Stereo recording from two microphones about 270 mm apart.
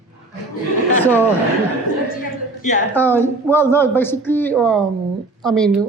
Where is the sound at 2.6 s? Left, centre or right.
Left.